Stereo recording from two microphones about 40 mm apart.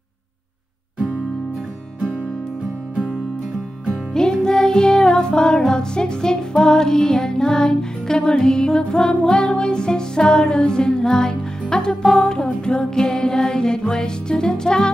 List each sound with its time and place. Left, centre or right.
4.3 s music: centre
12.9 s music: centre